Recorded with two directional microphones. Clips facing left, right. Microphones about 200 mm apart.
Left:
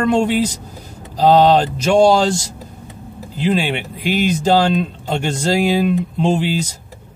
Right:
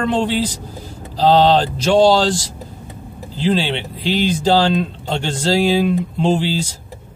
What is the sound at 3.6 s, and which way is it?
Speech, 10° left (ahead or behind).